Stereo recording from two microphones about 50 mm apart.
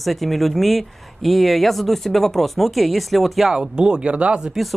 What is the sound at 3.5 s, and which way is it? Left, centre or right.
Speech, centre.